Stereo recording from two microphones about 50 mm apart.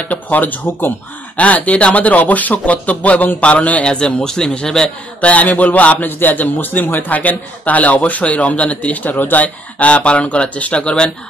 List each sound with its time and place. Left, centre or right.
0.1 s speech: left
1.3 s a man's voice: left
3.8 s a man's voice: centre